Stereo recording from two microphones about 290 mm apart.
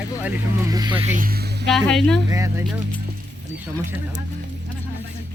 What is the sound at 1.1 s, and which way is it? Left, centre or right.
Speech, right.